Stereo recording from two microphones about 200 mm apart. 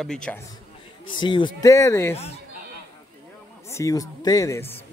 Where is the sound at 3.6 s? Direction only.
15° left (ahead or behind).